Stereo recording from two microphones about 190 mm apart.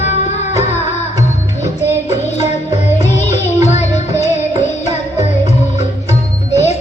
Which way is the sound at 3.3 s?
35° left (ahead or behind).